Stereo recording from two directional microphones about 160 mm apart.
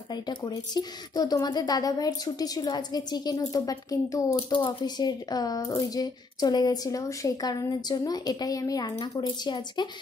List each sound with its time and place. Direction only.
0.1 s speech: 25° left (ahead or behind)